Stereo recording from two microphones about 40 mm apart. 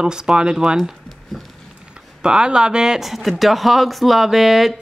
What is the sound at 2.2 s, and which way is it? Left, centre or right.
Speech, centre.